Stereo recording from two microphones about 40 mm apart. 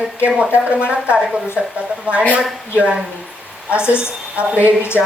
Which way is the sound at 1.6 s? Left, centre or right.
Centre.